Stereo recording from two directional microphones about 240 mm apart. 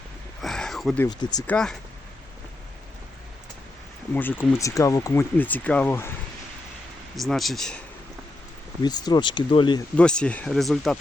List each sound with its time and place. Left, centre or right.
0.4 s a sound: centre
1.0 s speech: centre
4.1 s speech: centre
7.2 s speech: centre
8.8 s speech: centre
10.0 s speech: centre